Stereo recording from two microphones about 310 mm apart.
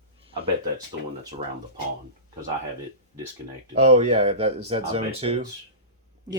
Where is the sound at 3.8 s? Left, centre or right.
Centre.